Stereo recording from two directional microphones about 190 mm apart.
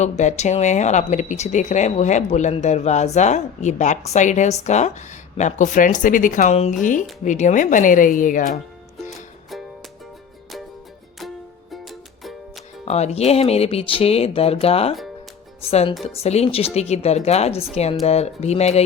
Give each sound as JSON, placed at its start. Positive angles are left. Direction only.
{"t": 0.0, "sound": "speech", "side_deg": 35}
{"t": 9.0, "sound": "music", "side_deg": 0}
{"t": 11.7, "sound": "music", "side_deg": 0}
{"t": 12.8, "sound": "speech", "side_deg": 35}